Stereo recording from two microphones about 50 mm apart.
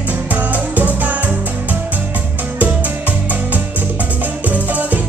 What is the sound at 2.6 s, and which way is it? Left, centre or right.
Music, right.